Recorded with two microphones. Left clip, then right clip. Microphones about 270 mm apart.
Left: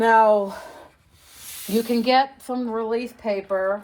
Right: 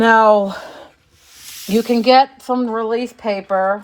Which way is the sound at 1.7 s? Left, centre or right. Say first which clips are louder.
Right 7 dB; right.